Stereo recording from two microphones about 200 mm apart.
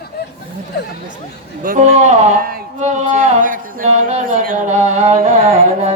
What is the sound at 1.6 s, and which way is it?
Speech, 35° right (ahead or behind).